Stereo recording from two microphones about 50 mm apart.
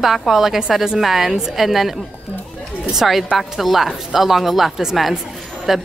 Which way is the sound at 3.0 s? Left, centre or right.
Centre.